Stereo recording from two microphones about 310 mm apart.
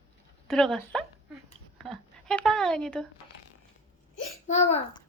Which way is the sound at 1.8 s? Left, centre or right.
Centre.